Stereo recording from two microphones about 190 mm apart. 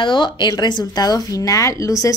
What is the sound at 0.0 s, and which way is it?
A woman's voice, 25° left (ahead or behind).